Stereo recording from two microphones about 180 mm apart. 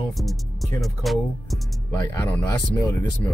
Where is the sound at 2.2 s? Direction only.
15° left (ahead or behind).